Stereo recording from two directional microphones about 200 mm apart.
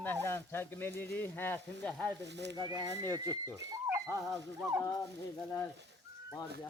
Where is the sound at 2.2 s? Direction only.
60° right (ahead or behind).